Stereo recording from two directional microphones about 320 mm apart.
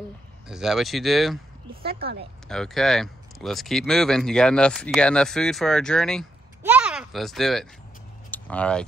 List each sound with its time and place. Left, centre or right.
0.5 s speech: centre
1.9 s speech: right
2.4 s speech: centre